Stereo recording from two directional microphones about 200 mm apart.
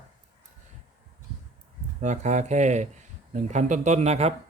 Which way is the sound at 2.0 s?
35° right (ahead or behind).